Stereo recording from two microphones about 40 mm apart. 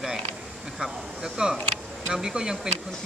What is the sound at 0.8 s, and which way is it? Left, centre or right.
Speech, centre.